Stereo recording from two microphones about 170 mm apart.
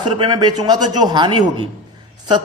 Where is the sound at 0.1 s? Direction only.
25° right (ahead or behind).